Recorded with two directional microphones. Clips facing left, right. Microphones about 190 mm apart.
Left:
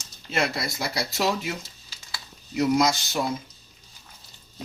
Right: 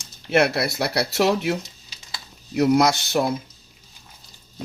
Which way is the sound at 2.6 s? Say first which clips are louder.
Right 4 dB; 60° right (ahead or behind).